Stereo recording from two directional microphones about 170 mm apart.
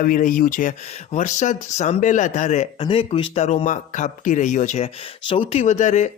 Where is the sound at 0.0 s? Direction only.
50° left (ahead or behind).